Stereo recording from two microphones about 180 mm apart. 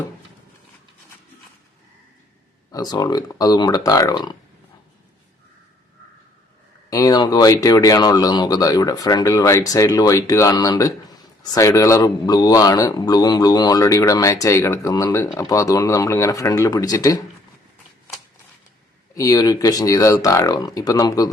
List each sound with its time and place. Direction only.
2.7 s a man's voice: 20° left (ahead or behind)
6.9 s a man's voice: 20° left (ahead or behind)
19.1 s a man's voice: 20° left (ahead or behind)